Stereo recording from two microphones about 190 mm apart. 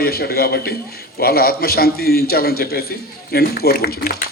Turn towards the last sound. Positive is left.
turn(degrees=50)  # may be behind; listen again after turning